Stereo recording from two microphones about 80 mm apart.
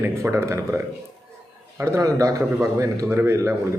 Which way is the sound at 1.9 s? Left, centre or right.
Right.